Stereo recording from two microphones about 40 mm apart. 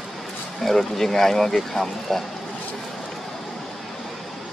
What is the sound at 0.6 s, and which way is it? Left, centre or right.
Speech, centre.